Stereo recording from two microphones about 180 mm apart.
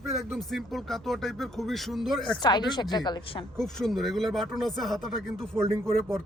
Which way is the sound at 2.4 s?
25° left (ahead or behind).